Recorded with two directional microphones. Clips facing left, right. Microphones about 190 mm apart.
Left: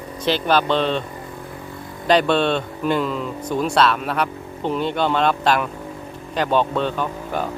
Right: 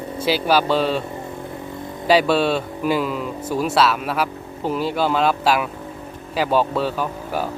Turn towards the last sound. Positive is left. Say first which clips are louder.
# even
turn(degrees=-5)  # may be behind; listen again after turning